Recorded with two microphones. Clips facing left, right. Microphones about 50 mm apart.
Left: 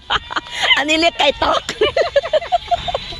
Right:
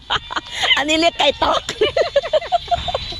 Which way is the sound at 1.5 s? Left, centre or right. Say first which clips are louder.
Left 2 dB; left.